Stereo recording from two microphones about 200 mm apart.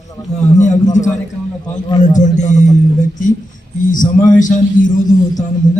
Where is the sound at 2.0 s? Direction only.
40° left (ahead or behind).